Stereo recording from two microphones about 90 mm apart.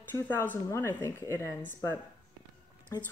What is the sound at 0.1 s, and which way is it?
Speech, 25° left (ahead or behind).